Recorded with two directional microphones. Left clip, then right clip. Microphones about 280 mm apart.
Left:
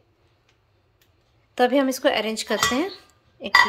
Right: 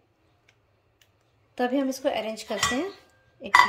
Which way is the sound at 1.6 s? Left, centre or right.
Centre.